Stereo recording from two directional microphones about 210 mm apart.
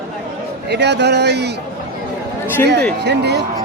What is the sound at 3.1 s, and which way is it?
Speech, 55° right (ahead or behind).